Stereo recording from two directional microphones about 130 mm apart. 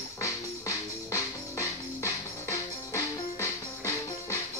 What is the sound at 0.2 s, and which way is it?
Music, 25° left (ahead or behind).